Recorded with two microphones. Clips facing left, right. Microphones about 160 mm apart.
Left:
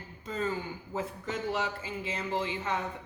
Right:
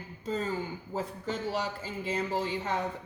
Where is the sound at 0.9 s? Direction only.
35° right (ahead or behind).